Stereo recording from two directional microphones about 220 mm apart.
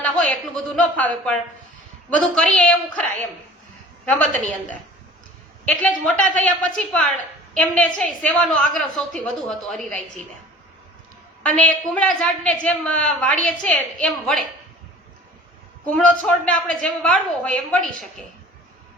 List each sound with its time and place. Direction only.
0.0 s a woman's voice: 5° left (ahead or behind)
4.4 s a woman's voice: 5° left (ahead or behind)
11.4 s a woman's voice: 5° left (ahead or behind)
15.9 s a woman's voice: 5° left (ahead or behind)